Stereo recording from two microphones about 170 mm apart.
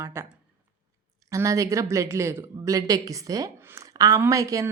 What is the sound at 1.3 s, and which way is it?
A woman's voice, 20° right (ahead or behind).